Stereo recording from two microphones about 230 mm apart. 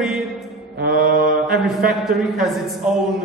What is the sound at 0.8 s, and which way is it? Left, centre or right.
Mantra, right.